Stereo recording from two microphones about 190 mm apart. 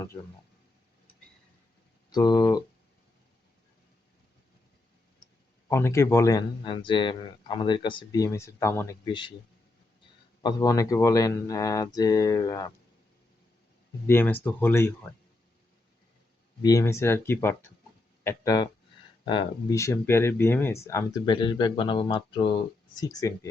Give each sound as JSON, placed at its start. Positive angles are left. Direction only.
{"t": 2.1, "sound": "speech", "side_deg": 20}
{"t": 5.6, "sound": "speech", "side_deg": 15}
{"t": 9.0, "sound": "speech", "side_deg": 25}
{"t": 10.4, "sound": "speech", "side_deg": 20}
{"t": 14.1, "sound": "speech", "side_deg": 10}
{"t": 16.6, "sound": "speech", "side_deg": 15}
{"t": 19.7, "sound": "speech", "side_deg": 15}